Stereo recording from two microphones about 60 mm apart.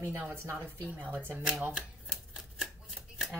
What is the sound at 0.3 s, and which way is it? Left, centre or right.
Speech, right.